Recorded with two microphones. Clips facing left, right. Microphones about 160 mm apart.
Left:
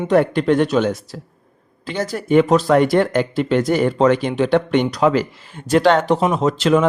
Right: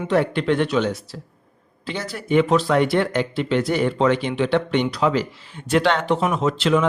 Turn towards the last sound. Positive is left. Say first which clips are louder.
# left 3 dB
turn(degrees=45)  # may be behind; listen again after turning